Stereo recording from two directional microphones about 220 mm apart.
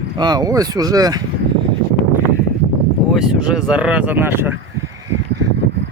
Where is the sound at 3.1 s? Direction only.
5° right (ahead or behind).